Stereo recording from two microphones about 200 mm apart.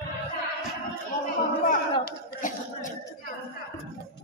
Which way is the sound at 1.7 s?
40° left (ahead or behind).